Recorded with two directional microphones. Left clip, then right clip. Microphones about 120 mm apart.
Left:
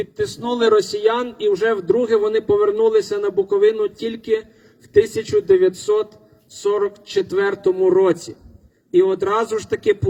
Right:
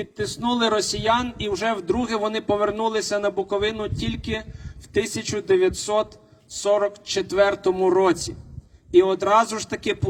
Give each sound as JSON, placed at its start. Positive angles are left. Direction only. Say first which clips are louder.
{"t": 0.0, "sound": "a man's voice", "louder": "left 3 dB", "side_deg": -30}